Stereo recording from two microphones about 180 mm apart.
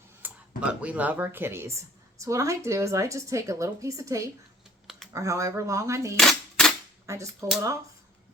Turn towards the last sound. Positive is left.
turn(degrees=-15)  # may be behind; listen again after turning